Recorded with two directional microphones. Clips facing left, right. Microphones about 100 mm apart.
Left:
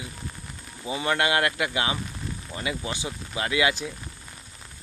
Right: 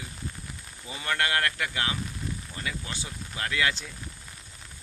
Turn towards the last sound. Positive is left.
turn(degrees=15)  # may be behind; listen again after turning